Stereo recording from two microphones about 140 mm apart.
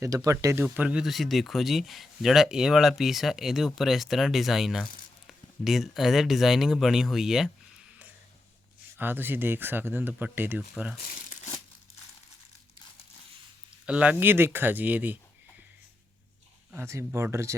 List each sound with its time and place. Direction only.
0.0 s speech: 25° right (ahead or behind)
0.6 s speech: 10° right (ahead or behind)
9.0 s speech: 15° right (ahead or behind)
11.0 s crumpling: 70° left (ahead or behind)
13.8 s speech: 10° right (ahead or behind)
16.7 s speech: 20° right (ahead or behind)